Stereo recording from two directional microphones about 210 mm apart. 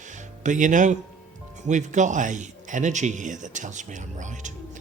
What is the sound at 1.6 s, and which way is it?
A man's voice, 35° right (ahead or behind).